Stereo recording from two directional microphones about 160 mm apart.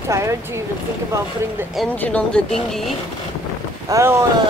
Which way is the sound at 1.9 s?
10° left (ahead or behind).